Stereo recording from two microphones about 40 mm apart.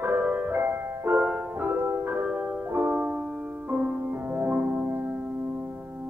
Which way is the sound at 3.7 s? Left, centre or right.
Right.